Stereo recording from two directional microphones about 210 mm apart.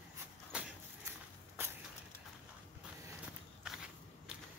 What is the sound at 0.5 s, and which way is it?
Vehicle, 5° right (ahead or behind).